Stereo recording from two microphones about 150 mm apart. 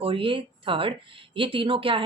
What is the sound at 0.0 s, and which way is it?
Speech, 35° right (ahead or behind).